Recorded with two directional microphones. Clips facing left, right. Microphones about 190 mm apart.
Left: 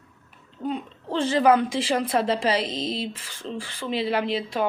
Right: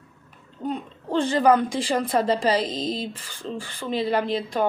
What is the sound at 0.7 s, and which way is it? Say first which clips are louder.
Speech: right 2 dB; 5° left (ahead or behind).